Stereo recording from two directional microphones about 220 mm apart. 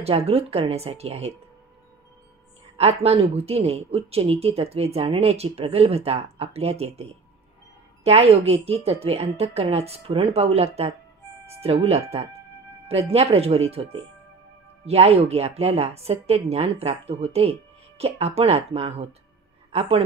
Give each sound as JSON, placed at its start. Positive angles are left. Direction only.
{"t": 0.0, "sound": "a woman's voice", "side_deg": -25}
{"t": 2.8, "sound": "a woman's voice", "side_deg": -30}
{"t": 14.9, "sound": "a woman's voice", "side_deg": -30}